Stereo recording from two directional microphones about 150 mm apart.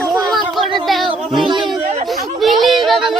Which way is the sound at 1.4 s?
30° right (ahead or behind).